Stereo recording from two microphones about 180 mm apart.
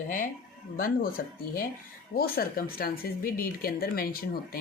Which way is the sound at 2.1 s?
55° left (ahead or behind).